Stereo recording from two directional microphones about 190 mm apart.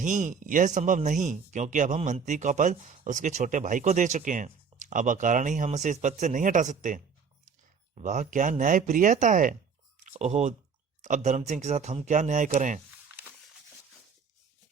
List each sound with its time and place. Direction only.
0.0 s speech: 40° right (ahead or behind)